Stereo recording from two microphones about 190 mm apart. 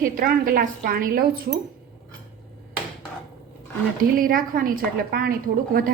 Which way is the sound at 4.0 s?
50° right (ahead or behind).